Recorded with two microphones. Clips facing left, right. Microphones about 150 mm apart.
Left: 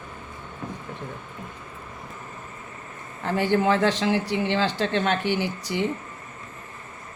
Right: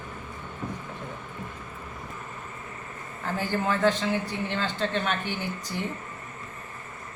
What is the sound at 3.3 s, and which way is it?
Speech, 75° left (ahead or behind).